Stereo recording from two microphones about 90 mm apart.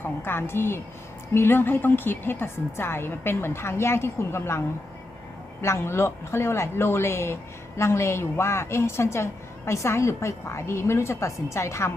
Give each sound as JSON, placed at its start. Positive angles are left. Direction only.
{"t": 0.0, "sound": "a woman's voice", "side_deg": 25}
{"t": 5.6, "sound": "a woman's voice", "side_deg": 30}